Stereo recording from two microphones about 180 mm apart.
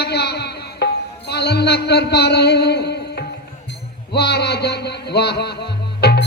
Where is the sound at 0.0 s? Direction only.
65° left (ahead or behind).